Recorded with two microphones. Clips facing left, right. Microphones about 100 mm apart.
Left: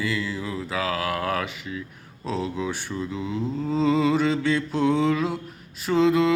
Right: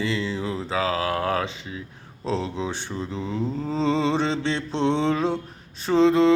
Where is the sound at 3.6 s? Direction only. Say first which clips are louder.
Left 2 dB; 30° right (ahead or behind).